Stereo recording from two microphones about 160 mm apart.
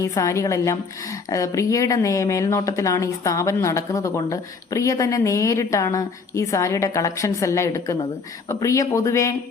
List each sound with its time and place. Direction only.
0.0 s speech: 20° left (ahead or behind)